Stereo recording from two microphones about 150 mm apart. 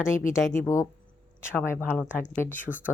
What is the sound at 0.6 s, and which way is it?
Speech, 20° left (ahead or behind).